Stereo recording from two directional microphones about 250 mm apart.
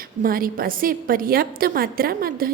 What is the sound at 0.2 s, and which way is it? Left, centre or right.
A woman's voice, right.